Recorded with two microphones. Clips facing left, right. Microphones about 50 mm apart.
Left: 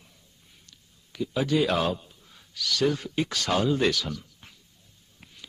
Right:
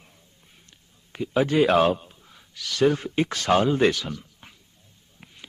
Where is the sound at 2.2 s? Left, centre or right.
Right.